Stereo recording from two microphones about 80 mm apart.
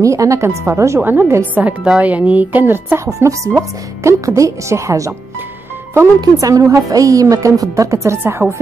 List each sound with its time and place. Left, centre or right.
0.0 s speech: right
1.0 s speech: right
3.2 s speech: right
6.4 s a woman's voice: right